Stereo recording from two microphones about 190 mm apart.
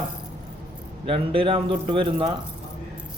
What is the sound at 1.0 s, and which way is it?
Speech, 30° right (ahead or behind).